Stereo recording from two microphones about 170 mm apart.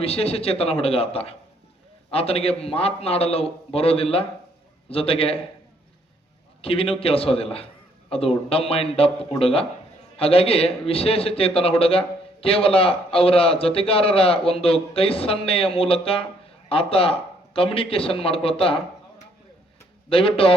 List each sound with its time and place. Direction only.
0.0 s a man's voice: 35° left (ahead or behind)
6.6 s a man's voice: 35° left (ahead or behind)
20.1 s a man's voice: 30° left (ahead or behind)